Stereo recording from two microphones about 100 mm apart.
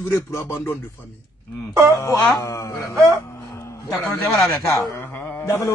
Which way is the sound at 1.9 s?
30° left (ahead or behind).